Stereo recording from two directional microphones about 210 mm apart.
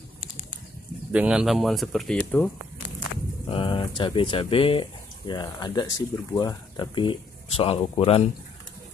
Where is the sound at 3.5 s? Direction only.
25° left (ahead or behind).